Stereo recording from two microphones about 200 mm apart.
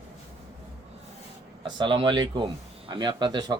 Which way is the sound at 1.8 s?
25° right (ahead or behind).